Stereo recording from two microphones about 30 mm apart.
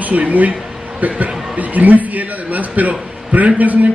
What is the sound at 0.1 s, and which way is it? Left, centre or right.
A man's voice, right.